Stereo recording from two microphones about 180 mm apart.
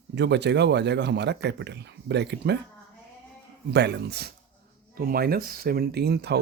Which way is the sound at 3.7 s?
70° right (ahead or behind).